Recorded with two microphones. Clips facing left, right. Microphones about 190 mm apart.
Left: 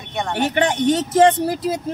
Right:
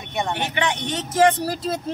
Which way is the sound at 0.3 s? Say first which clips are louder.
Left 8 dB; 45° left (ahead or behind).